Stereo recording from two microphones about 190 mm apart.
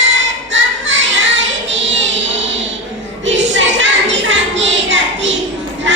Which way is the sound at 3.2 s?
75° right (ahead or behind).